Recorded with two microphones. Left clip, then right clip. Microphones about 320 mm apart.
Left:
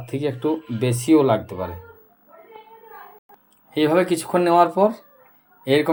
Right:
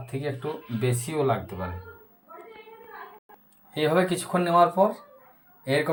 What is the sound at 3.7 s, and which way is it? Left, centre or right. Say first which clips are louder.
Speech: left 5 dB; centre.